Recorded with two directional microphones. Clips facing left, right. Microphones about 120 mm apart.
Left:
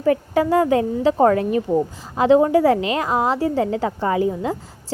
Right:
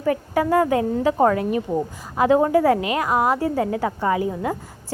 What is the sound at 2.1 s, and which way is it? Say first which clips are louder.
Speech: left 3 dB; 25° left (ahead or behind).